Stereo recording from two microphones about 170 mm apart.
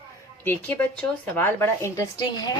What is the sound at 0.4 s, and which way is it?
Speech, 10° left (ahead or behind).